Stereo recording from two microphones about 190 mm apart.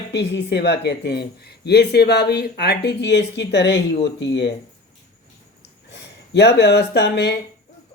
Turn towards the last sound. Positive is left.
turn(degrees=60)  # may be behind; listen again after turning